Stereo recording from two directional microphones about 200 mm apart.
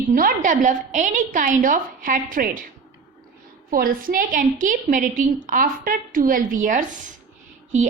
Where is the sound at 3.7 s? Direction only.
45° right (ahead or behind).